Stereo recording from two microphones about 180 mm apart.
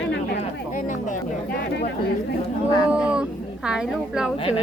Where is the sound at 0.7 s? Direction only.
45° left (ahead or behind).